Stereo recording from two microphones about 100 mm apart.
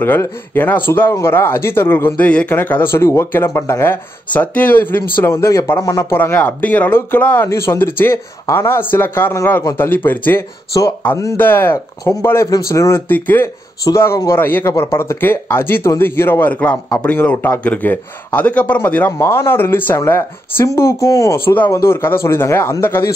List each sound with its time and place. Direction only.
0.0 s speech: 20° left (ahead or behind)
13.1 s speech: 20° left (ahead or behind)
13.8 s a man's voice: 30° left (ahead or behind)